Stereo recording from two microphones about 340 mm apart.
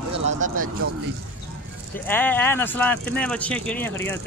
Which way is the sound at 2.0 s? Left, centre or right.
Centre.